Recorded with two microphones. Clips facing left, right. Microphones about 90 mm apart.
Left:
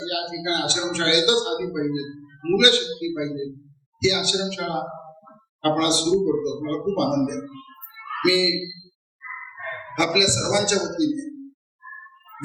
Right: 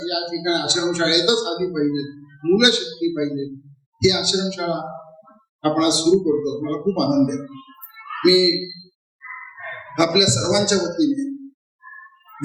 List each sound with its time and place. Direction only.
0.0 s speech: 15° right (ahead or behind)
9.9 s speech: 20° right (ahead or behind)